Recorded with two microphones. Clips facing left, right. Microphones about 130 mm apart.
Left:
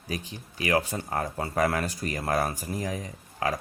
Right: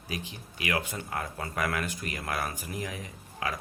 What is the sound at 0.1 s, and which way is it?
Speech, 40° left (ahead or behind).